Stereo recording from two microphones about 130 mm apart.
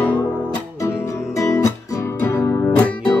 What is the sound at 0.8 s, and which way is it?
Music, 25° left (ahead or behind).